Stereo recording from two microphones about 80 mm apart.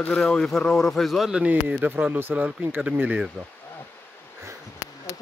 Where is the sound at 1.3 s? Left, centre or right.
Centre.